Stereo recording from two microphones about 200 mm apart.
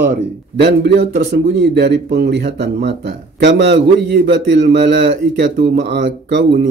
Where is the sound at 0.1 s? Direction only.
55° right (ahead or behind).